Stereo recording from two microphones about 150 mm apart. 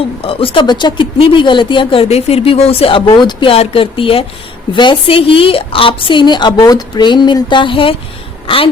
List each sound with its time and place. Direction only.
0.0 s speech: 40° left (ahead or behind)